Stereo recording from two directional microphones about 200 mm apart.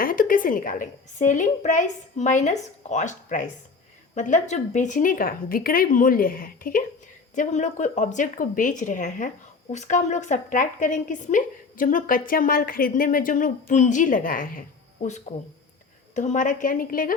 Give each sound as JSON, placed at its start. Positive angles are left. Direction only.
{"t": 0.0, "sound": "a woman's voice", "side_deg": 45}
{"t": 15.3, "sound": "speech", "side_deg": 25}
{"t": 16.1, "sound": "a woman's voice", "side_deg": 40}